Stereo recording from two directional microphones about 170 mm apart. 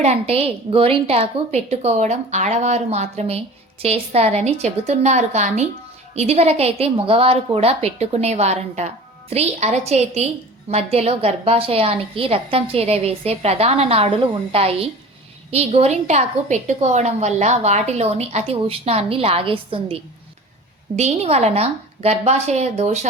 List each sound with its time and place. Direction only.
0.0 s a woman's voice: 35° right (ahead or behind)